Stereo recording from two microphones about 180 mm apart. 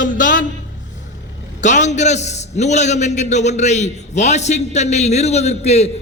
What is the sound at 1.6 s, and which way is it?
A man's voice, 40° left (ahead or behind).